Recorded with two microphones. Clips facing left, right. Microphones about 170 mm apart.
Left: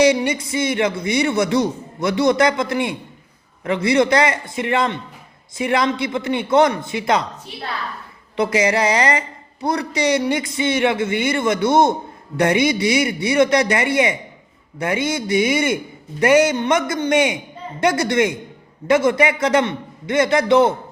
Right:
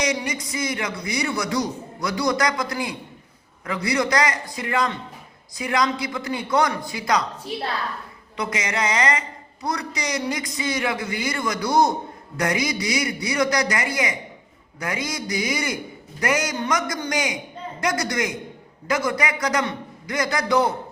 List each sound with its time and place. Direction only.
0.0 s a man's voice: 30° left (ahead or behind)
8.4 s a man's voice: 30° left (ahead or behind)